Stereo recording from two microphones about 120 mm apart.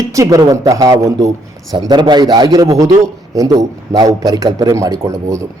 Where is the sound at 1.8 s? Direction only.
40° right (ahead or behind).